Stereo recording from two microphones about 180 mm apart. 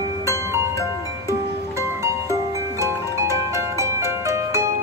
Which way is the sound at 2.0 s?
15° right (ahead or behind).